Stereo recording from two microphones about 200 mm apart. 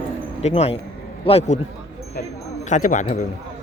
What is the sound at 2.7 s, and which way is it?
Speech, 40° left (ahead or behind).